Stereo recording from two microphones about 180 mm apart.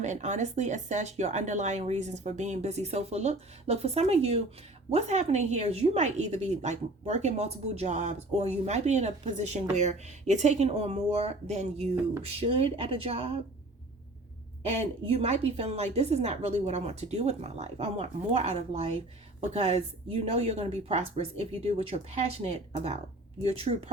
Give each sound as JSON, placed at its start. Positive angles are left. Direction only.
{"t": 0.0, "sound": "a woman's voice", "side_deg": -40}
{"t": 14.6, "sound": "a woman's voice", "side_deg": -35}